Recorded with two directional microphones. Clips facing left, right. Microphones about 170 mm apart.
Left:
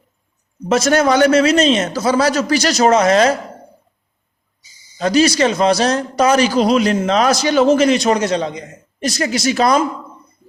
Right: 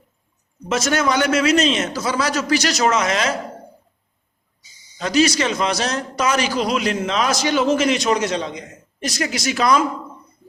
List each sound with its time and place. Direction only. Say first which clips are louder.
0.7 s a man's voice: left 6 dB; 35° left (ahead or behind)
4.9 s a man's voice: left 4 dB; 35° left (ahead or behind)